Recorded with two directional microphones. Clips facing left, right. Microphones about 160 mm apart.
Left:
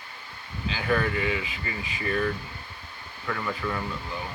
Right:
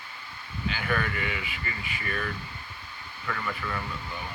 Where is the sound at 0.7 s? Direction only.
25° left (ahead or behind).